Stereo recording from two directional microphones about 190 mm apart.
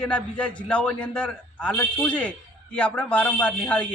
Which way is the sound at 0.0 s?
5° left (ahead or behind).